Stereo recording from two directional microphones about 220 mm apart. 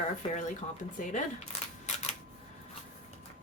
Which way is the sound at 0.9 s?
35° left (ahead or behind).